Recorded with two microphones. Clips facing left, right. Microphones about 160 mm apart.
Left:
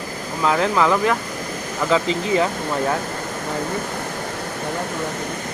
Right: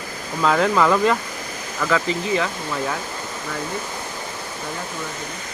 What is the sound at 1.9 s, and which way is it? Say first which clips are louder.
Speech: left 2 dB; 30° left (ahead or behind).